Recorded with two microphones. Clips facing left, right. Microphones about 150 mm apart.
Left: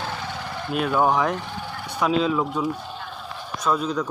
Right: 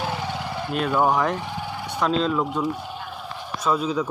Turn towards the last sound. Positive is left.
turn(degrees=-5)  # may be behind; listen again after turning